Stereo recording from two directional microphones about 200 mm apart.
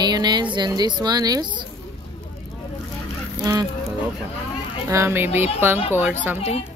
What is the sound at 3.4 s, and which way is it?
Goose, 20° right (ahead or behind).